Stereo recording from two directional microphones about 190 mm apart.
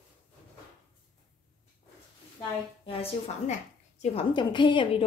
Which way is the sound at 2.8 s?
30° left (ahead or behind).